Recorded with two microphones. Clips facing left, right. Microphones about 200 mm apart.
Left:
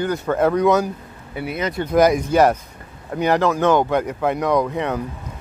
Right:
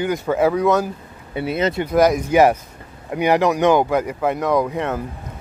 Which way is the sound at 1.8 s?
Centre (ahead or behind).